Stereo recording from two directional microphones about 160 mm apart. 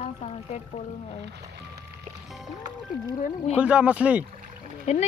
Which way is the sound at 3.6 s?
5° right (ahead or behind).